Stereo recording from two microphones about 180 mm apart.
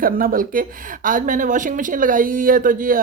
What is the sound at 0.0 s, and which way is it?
Speech, 50° right (ahead or behind).